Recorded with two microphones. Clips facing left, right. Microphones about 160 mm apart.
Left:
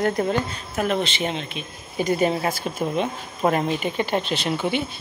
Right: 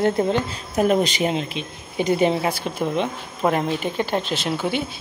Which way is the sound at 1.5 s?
20° right (ahead or behind).